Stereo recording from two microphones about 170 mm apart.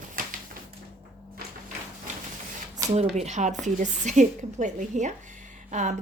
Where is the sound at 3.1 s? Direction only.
45° right (ahead or behind).